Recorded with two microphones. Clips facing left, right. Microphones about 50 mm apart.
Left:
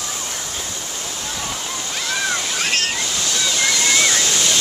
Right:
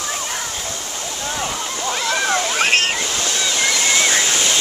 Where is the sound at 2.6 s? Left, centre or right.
Right.